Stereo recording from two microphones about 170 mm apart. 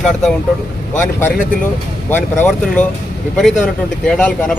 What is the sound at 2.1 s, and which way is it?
Speech, 10° left (ahead or behind).